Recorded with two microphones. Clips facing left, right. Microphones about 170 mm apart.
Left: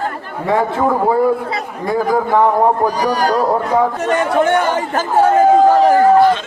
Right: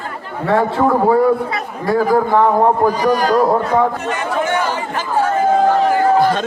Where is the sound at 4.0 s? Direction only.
45° left (ahead or behind).